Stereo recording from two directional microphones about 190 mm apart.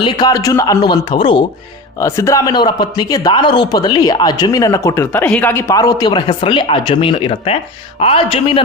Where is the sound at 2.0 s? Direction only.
15° left (ahead or behind).